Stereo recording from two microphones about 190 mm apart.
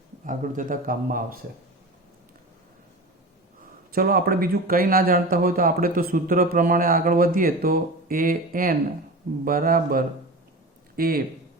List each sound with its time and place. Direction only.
0.3 s speech: 45° right (ahead or behind)
3.9 s speech: 50° right (ahead or behind)